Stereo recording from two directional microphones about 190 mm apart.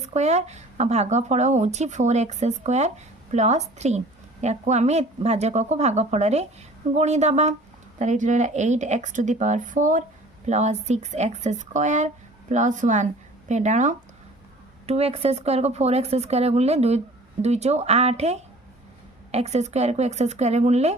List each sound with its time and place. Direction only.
0.0 s a woman's voice: 35° right (ahead or behind)